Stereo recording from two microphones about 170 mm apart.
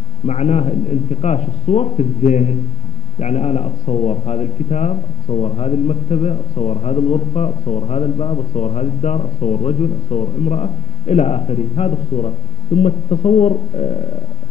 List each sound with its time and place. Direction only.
0.3 s a man's voice: 40° left (ahead or behind)